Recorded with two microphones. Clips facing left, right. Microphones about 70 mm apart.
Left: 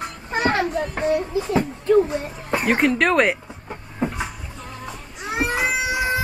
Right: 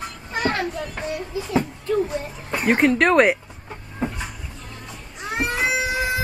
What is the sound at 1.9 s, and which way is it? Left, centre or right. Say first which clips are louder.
Speech: left 6 dB; left.